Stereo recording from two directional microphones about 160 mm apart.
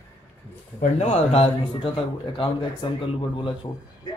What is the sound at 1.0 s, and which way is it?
Speech, 40° left (ahead or behind).